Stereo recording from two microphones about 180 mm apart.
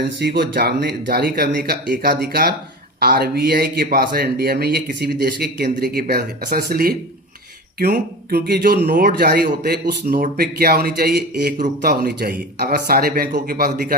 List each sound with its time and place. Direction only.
0.2 s speech: 60° right (ahead or behind)